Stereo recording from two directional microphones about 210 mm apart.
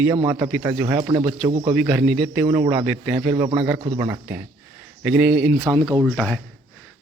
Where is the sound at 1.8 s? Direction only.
Centre (ahead or behind).